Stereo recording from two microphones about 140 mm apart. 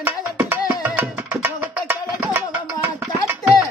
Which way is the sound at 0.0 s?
15° right (ahead or behind).